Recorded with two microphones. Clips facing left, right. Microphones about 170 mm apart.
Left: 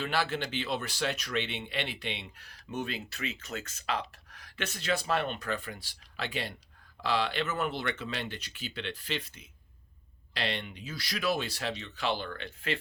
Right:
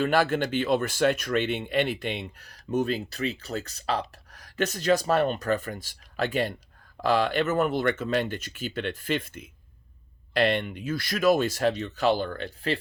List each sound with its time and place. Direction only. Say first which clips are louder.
0.0 s speech: right 8 dB; 50° right (ahead or behind)